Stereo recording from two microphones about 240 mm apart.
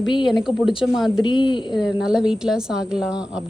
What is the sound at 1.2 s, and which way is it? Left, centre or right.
Speech, centre.